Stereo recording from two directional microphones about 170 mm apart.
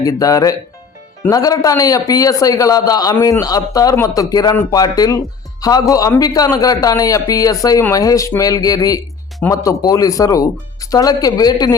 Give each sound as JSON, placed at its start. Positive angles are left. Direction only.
{"t": 0.0, "sound": "a man's voice", "side_deg": 20}